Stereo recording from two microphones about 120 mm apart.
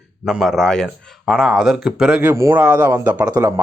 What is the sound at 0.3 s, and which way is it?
Speech, 5° right (ahead or behind).